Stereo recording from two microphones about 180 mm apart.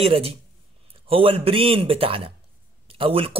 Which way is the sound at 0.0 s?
35° right (ahead or behind).